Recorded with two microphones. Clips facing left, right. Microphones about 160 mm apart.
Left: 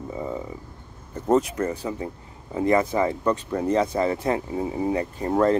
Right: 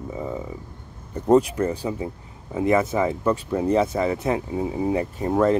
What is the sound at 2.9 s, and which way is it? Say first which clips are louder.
Speech: right 1 dB; 5° right (ahead or behind).